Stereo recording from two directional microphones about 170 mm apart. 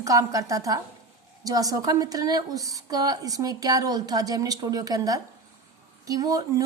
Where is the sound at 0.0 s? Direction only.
20° right (ahead or behind).